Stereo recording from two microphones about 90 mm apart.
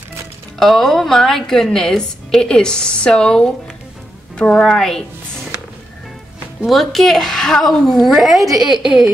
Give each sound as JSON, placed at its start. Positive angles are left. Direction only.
{"t": 0.6, "sound": "a woman's voice", "side_deg": 5}
{"t": 6.6, "sound": "a woman's voice", "side_deg": 0}